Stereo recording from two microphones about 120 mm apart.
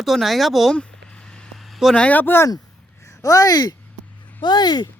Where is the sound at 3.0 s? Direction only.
25° left (ahead or behind).